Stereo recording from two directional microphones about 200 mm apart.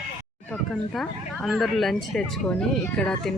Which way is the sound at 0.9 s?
Centre (ahead or behind).